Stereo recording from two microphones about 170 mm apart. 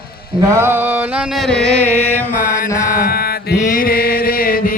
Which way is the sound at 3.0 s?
65° left (ahead or behind).